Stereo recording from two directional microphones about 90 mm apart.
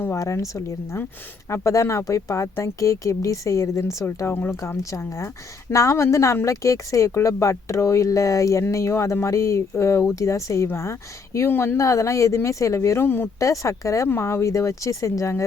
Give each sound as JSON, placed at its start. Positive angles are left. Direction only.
{"t": 0.0, "sound": "speech", "side_deg": 35}
{"t": 4.8, "sound": "speech", "side_deg": 35}